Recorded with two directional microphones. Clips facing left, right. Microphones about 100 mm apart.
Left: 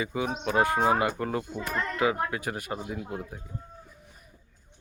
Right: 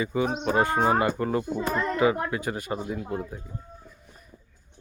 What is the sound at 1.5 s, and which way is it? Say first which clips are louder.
Speech: right 5 dB; 25° right (ahead or behind).